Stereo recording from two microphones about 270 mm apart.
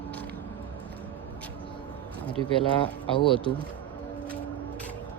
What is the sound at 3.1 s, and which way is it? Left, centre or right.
Speech, centre.